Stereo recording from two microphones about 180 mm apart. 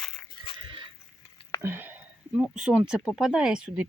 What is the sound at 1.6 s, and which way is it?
Speech, 10° right (ahead or behind).